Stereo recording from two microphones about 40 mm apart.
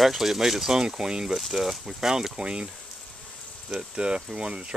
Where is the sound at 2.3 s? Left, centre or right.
Right.